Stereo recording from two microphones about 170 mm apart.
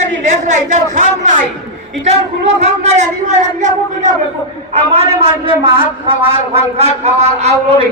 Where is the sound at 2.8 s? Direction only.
40° right (ahead or behind).